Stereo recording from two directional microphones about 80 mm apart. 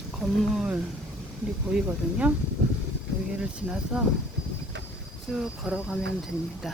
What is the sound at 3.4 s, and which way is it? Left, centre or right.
Speech, centre.